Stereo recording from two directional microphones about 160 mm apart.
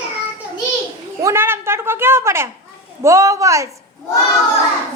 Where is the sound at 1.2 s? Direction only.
15° right (ahead or behind).